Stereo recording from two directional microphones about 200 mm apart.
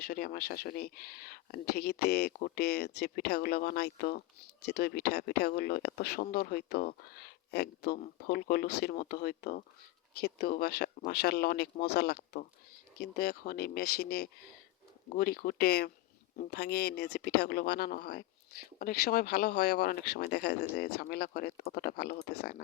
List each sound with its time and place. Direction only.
0.0 s speech: 50° left (ahead or behind)